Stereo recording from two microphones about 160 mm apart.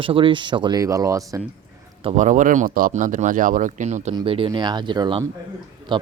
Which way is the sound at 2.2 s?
50° right (ahead or behind).